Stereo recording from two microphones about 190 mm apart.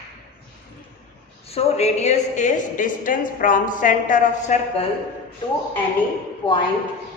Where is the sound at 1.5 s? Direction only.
35° left (ahead or behind).